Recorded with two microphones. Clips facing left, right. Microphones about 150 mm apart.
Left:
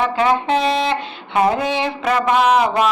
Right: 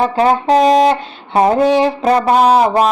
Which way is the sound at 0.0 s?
40° right (ahead or behind).